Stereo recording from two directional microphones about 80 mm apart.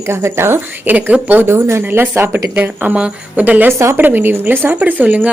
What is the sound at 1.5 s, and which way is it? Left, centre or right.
A woman's voice, right.